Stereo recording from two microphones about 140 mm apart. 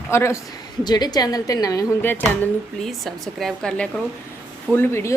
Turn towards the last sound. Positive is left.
turn(degrees=20)  # may be behind; listen again after turning